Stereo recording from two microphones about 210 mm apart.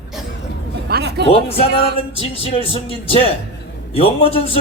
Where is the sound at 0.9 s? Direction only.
50° right (ahead or behind).